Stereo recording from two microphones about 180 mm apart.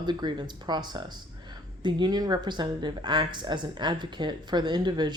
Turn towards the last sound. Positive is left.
turn(degrees=-25)  # may be behind; listen again after turning